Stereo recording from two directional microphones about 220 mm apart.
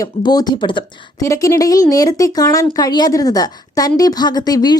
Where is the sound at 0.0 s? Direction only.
15° left (ahead or behind).